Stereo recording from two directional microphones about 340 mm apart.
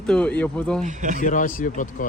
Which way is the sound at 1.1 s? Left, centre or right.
Left.